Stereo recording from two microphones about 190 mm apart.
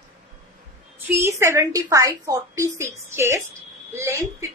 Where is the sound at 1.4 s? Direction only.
15° right (ahead or behind).